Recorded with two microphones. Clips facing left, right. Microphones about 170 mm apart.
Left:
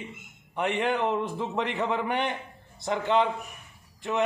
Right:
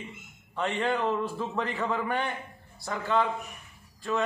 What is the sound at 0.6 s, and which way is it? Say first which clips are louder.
A man's voice: left 2 dB; 15° left (ahead or behind).